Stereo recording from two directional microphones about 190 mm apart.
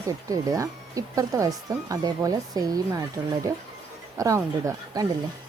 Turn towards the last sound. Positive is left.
turn(degrees=-15)  # may be behind; listen again after turning